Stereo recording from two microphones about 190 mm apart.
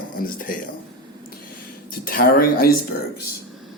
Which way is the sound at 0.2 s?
50° left (ahead or behind).